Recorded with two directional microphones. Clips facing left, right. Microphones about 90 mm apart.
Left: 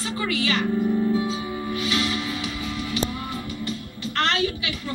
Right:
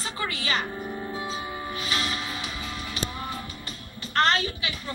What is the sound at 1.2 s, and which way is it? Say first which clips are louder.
Music: left 5 dB; 35° right (ahead or behind).